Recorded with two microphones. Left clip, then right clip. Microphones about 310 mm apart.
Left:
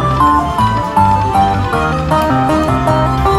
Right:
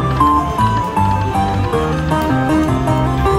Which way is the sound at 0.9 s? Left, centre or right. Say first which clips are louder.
Left 6 dB; centre.